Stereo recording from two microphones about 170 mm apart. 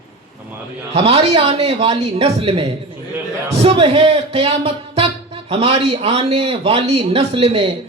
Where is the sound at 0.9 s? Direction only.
35° right (ahead or behind).